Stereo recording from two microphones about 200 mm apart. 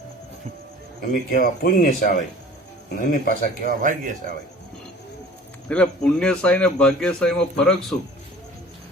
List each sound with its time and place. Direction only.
1.1 s speech: 50° left (ahead or behind)
3.7 s speech: 40° right (ahead or behind)
5.6 s speech: 5° left (ahead or behind)